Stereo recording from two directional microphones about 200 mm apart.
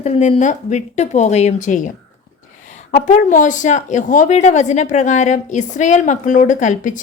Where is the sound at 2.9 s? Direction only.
40° left (ahead or behind).